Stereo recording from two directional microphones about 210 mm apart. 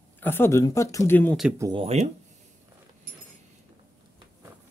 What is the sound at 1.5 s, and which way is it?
Speech, 15° right (ahead or behind).